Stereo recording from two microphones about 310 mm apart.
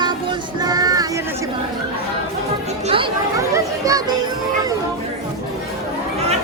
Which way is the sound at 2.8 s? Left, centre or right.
Centre.